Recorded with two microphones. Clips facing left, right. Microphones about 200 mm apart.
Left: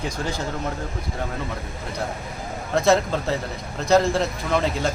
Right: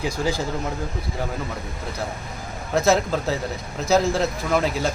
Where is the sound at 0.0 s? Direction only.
10° right (ahead or behind).